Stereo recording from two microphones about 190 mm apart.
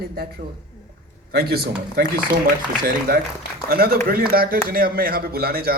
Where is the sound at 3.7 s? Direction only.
55° right (ahead or behind).